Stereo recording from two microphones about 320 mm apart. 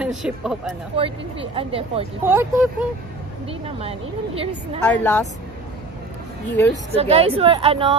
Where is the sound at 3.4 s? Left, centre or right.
Centre.